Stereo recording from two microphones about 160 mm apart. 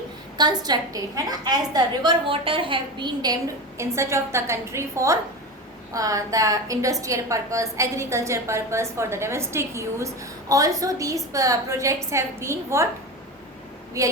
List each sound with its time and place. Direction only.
0.3 s a woman's voice: 25° right (ahead or behind)